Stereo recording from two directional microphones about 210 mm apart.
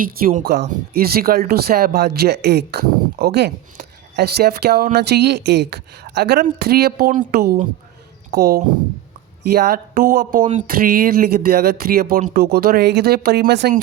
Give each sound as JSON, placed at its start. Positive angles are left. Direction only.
{"t": 0.0, "sound": "speech", "side_deg": -40}